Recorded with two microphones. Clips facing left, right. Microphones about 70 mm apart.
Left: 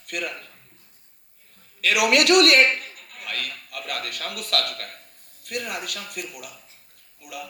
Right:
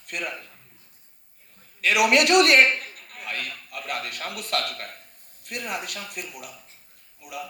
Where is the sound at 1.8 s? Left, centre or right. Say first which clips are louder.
Even; right.